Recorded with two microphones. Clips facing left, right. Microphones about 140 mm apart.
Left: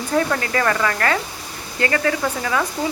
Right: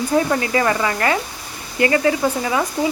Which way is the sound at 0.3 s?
15° right (ahead or behind).